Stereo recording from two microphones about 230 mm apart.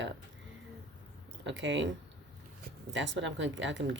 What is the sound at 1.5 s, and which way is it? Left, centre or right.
Speech, right.